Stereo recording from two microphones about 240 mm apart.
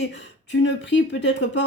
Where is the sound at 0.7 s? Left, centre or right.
Left.